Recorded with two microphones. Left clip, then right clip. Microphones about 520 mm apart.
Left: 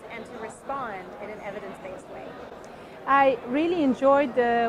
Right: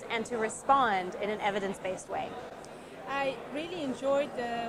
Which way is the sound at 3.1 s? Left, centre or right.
Left.